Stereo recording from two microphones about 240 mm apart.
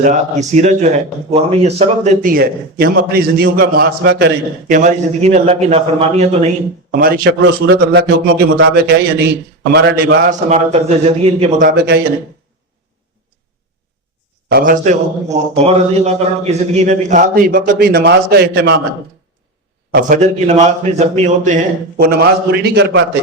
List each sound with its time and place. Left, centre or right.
0.0 s a man's voice: right
2.3 s a man's voice: right
4.7 s a man's voice: right
7.0 s a man's voice: right
10.2 s a man's voice: right
14.5 s a man's voice: right
19.9 s a man's voice: right